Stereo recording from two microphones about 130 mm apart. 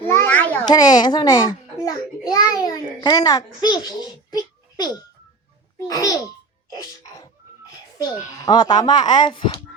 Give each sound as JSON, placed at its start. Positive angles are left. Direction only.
{"t": 0.1, "sound": "children playing", "side_deg": 15}
{"t": 0.6, "sound": "a child's voice", "side_deg": 30}
{"t": 8.0, "sound": "a child's voice", "side_deg": 35}